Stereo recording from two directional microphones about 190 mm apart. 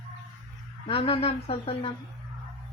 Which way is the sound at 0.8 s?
30° left (ahead or behind).